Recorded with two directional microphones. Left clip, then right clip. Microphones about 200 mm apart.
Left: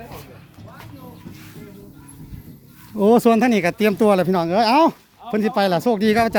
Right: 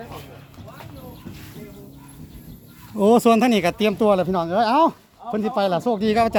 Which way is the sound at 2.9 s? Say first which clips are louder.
Left 1 dB; 15° left (ahead or behind).